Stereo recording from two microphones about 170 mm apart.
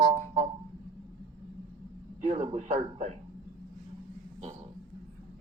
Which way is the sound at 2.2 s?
40° right (ahead or behind).